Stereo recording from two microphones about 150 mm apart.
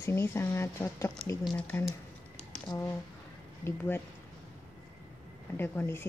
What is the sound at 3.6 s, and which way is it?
Speech, 15° left (ahead or behind).